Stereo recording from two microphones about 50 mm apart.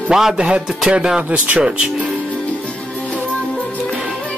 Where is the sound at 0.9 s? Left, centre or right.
Centre.